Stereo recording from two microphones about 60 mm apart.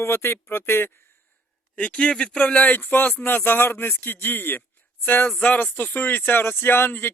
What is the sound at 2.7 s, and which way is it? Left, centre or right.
Speech, left.